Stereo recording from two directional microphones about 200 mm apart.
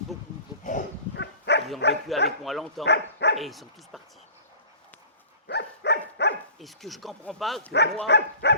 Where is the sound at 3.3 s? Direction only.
Centre (ahead or behind).